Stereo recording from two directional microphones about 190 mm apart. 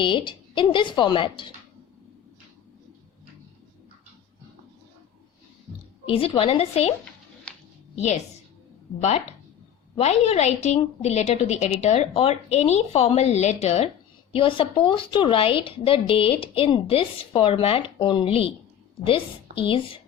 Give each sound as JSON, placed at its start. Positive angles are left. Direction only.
{"t": 0.0, "sound": "a woman's voice", "side_deg": 25}
{"t": 6.1, "sound": "a woman's voice", "side_deg": 30}
{"t": 7.9, "sound": "a woman's voice", "side_deg": 35}